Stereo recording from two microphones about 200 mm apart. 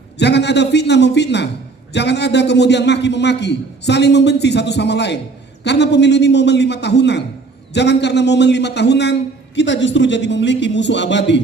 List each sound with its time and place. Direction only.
0.2 s a man's voice: 60° left (ahead or behind)